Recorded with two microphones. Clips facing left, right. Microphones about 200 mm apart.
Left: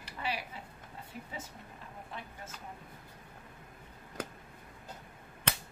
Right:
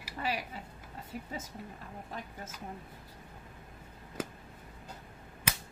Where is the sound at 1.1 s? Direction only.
45° right (ahead or behind).